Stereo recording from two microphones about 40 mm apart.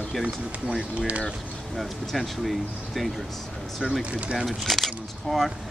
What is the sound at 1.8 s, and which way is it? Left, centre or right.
Speech, centre.